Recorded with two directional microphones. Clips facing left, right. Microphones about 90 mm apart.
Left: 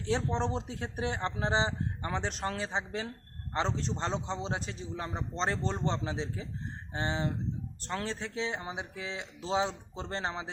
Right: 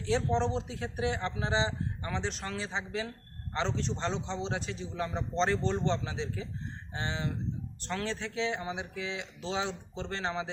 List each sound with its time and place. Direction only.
0.1 s a man's voice: 45° left (ahead or behind)